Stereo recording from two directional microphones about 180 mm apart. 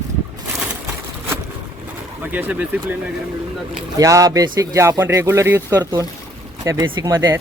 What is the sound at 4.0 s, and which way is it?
A man's voice, 20° right (ahead or behind).